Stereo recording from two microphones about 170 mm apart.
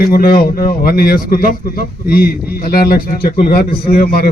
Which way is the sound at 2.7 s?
60° left (ahead or behind).